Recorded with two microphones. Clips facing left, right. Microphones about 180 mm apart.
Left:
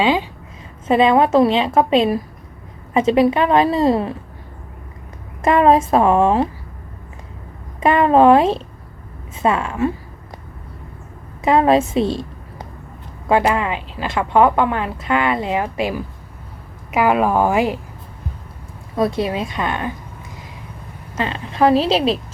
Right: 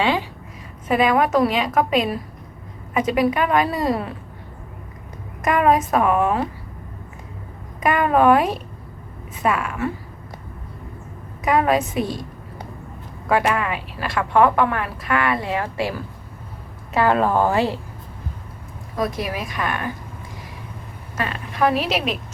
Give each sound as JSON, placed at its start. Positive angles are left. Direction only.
{"t": 0.0, "sound": "speech", "side_deg": 20}
{"t": 5.4, "sound": "speech", "side_deg": 30}
{"t": 7.8, "sound": "speech", "side_deg": 25}
{"t": 11.4, "sound": "speech", "side_deg": 25}
{"t": 13.2, "sound": "a woman's voice", "side_deg": 25}
{"t": 18.9, "sound": "speech", "side_deg": 25}
{"t": 21.2, "sound": "speech", "side_deg": 25}